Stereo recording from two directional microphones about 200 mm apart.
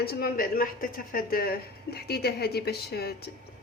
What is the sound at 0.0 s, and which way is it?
Speech, 50° left (ahead or behind).